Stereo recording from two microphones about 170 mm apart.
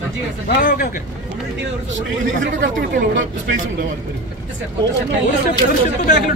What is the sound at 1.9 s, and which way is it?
Speech, 90° right.